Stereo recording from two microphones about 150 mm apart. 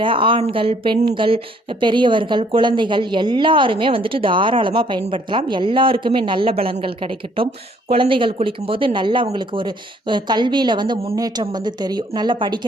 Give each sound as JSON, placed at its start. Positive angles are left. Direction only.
{"t": 0.0, "sound": "a woman's voice", "side_deg": -35}